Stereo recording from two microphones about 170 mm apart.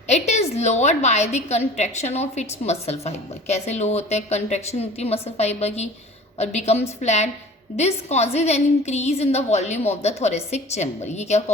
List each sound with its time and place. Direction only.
0.1 s a woman's voice: 40° left (ahead or behind)